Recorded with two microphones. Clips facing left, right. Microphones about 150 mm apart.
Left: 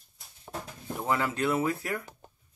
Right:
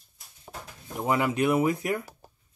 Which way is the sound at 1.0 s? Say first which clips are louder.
Right 4 dB; 15° right (ahead or behind).